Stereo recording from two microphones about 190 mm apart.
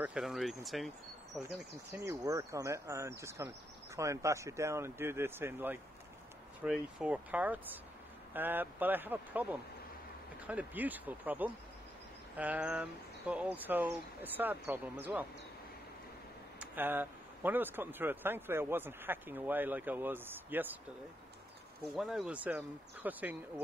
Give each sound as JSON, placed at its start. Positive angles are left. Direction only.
{"t": 0.0, "sound": "speech", "side_deg": -5}
{"t": 2.0, "sound": "speech", "side_deg": -15}
{"t": 16.5, "sound": "speech", "side_deg": -10}
{"t": 21.9, "sound": "speech", "side_deg": 0}